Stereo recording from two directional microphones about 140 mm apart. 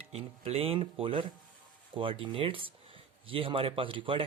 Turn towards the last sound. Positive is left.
turn(degrees=-40)  # may be behind; listen again after turning